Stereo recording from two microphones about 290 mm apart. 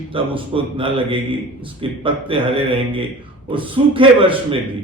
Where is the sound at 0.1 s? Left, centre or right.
Centre.